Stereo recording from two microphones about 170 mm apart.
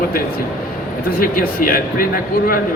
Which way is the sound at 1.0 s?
60° left (ahead or behind).